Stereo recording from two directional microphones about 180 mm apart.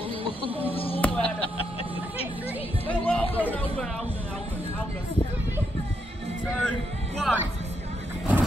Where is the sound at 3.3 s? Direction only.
10° left (ahead or behind).